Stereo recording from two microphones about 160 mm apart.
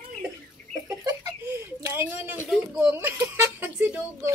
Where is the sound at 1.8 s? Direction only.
15° right (ahead or behind).